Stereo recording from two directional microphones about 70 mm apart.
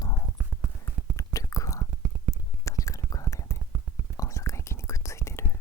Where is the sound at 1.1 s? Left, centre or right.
Left.